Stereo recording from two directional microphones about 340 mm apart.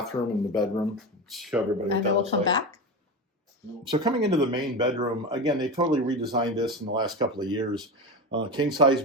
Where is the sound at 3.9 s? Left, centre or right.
Centre.